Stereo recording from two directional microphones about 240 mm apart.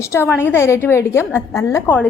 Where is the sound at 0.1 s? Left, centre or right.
Centre.